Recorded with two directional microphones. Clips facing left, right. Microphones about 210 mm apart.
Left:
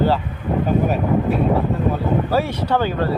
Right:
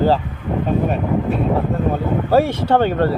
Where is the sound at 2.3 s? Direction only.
50° right (ahead or behind).